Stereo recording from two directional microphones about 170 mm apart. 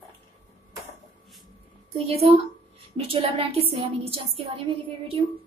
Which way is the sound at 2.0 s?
35° right (ahead or behind).